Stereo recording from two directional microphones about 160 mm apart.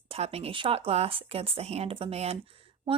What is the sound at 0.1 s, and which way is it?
Speech, 40° right (ahead or behind).